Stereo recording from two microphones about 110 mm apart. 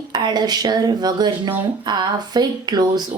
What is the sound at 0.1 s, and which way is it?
A woman's voice, 40° right (ahead or behind).